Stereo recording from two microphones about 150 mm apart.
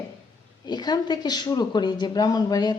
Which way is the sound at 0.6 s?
30° left (ahead or behind).